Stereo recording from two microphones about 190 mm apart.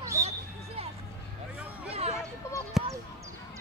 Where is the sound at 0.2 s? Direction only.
15° right (ahead or behind).